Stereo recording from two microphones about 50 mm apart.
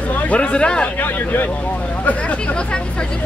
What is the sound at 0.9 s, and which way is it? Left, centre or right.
Speech, left.